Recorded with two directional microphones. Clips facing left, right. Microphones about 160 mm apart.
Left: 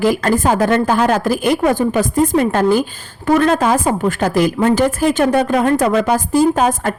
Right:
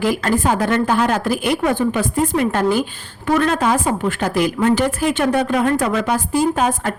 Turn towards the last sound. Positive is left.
turn(degrees=40)  # may be behind; listen again after turning